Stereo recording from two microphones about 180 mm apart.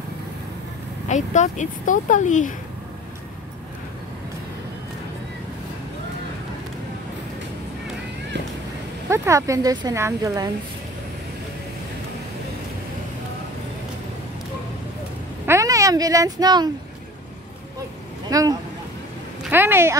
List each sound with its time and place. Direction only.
1.0 s speech: 40° left (ahead or behind)
9.1 s speech: 15° right (ahead or behind)
15.4 s speech: 15° right (ahead or behind)
18.3 s speech: 20° right (ahead or behind)